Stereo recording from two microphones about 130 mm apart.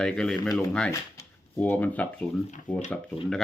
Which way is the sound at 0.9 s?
20° left (ahead or behind).